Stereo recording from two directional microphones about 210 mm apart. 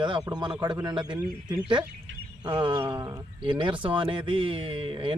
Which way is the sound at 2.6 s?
20° right (ahead or behind).